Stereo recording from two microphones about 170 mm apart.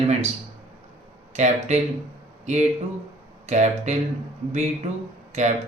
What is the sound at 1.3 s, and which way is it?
Speech, 40° right (ahead or behind).